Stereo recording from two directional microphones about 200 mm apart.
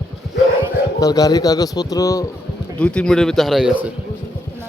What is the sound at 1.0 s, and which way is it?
Speech, 20° left (ahead or behind).